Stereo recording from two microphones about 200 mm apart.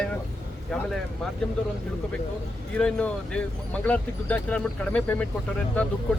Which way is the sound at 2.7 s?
5° left (ahead or behind).